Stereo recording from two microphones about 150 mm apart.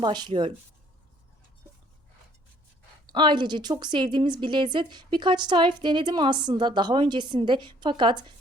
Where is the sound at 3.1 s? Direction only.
30° right (ahead or behind).